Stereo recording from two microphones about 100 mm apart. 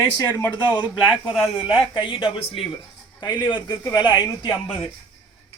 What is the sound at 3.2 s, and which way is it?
Speech, 50° left (ahead or behind).